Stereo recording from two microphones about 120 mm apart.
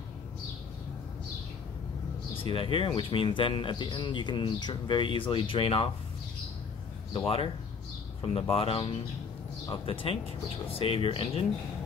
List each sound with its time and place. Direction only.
2.3 s speech: 45° left (ahead or behind)
7.2 s speech: 50° left (ahead or behind)
10.7 s speech: 50° left (ahead or behind)